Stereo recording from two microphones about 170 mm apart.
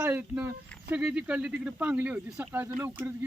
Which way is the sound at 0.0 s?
10° right (ahead or behind).